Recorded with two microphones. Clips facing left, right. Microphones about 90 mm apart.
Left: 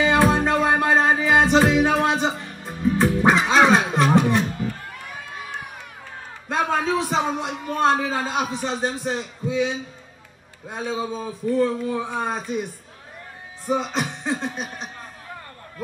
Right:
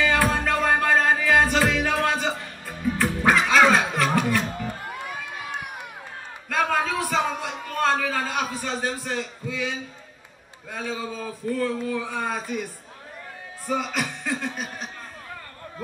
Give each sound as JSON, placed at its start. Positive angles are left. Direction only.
{"t": 0.0, "sound": "music", "side_deg": 25}
{"t": 4.6, "sound": "run", "side_deg": -20}
{"t": 6.5, "sound": "a sound", "side_deg": 20}
{"t": 10.7, "sound": "speech", "side_deg": 20}
{"t": 13.7, "sound": "speech", "side_deg": 25}